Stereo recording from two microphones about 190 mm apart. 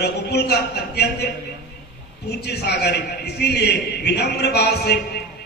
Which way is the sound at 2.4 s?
60° left (ahead or behind).